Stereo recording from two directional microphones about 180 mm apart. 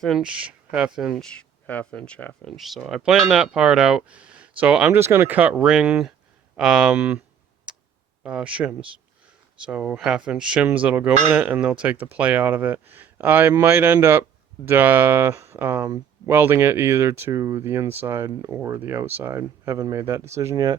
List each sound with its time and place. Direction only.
0.0 s speech: 5° right (ahead or behind)
1.6 s speech: 5° left (ahead or behind); by 7.2 s 10° right (ahead or behind)
7.7 s tick: 5° right (ahead or behind)
8.2 s speech: 5° right (ahead or behind)